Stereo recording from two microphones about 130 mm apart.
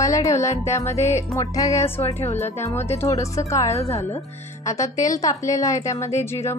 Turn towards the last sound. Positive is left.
turn(degrees=20)  # may be behind; listen again after turning